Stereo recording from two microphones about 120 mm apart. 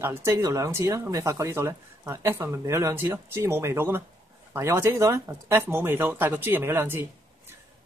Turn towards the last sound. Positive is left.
turn(degrees=-20)  # may be behind; listen again after turning